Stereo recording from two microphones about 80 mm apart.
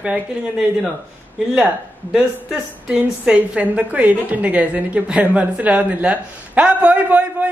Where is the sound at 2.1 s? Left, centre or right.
Centre.